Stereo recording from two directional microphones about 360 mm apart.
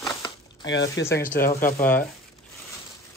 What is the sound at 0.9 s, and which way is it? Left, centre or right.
Speech, centre.